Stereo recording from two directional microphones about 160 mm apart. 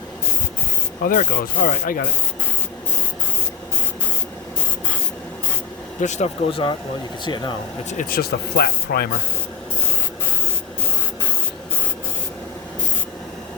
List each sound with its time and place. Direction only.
1.0 s speech: 60° left (ahead or behind)
6.0 s speech: 45° left (ahead or behind); by 7.5 s 30° left (ahead or behind)
7.9 s speech: 55° left (ahead or behind)
8.2 s speech: 80° left